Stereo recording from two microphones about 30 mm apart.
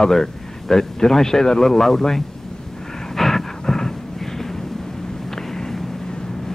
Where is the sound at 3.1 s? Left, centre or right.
Centre.